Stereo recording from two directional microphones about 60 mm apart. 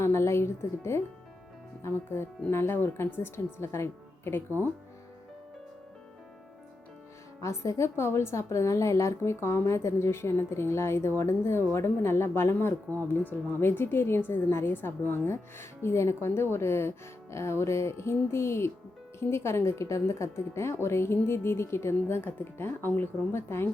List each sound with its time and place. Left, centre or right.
0.0 s speech: left
7.4 s a woman's voice: left
7.9 s a woman's voice: left